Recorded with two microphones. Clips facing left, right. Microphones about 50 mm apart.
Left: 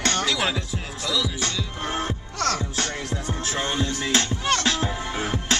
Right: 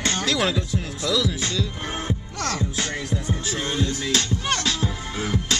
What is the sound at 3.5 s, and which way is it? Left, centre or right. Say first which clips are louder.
Music: left 1 dB; centre.